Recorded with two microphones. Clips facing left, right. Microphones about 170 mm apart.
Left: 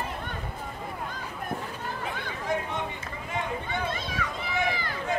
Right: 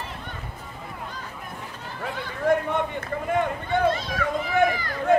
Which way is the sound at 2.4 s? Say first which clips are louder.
Right 9 dB; 55° right (ahead or behind).